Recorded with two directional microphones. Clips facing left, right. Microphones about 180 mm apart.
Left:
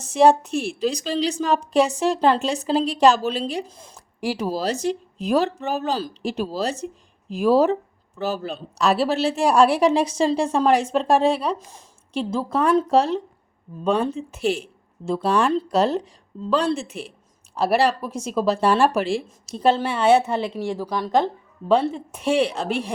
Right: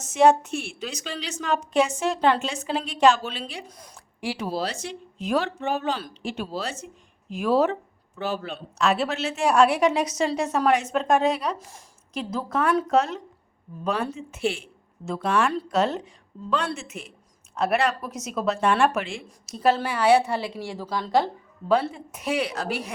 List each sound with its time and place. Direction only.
0.0 s a woman's voice: 35° left (ahead or behind)
4.2 s a woman's voice: 40° left (ahead or behind)
11.5 s speech: 20° left (ahead or behind)
12.1 s a woman's voice: 30° left (ahead or behind)
22.1 s a woman's voice: 30° left (ahead or behind)